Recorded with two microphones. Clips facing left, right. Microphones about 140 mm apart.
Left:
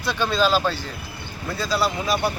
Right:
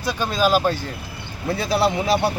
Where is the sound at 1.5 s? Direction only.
60° right (ahead or behind).